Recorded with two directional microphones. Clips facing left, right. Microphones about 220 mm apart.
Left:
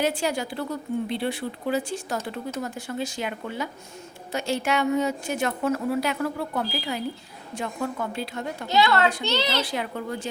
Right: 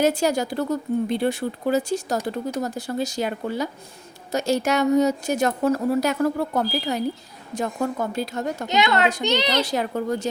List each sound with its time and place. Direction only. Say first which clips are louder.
0.0 s a woman's voice: right 5 dB; 40° right (ahead or behind)
8.6 s a woman's voice: even; 20° right (ahead or behind)
9.6 s a woman's voice: right 5 dB; 40° right (ahead or behind)